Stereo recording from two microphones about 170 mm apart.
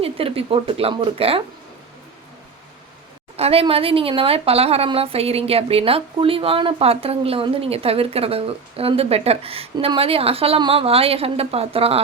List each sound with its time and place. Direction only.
0.0 s speech: 35° right (ahead or behind)
3.3 s speech: 35° right (ahead or behind)